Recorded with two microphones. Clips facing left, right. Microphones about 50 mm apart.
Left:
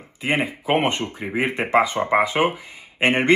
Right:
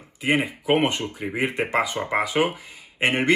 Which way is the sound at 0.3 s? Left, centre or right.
Left.